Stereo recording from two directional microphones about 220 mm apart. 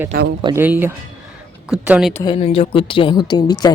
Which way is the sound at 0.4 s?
10° right (ahead or behind).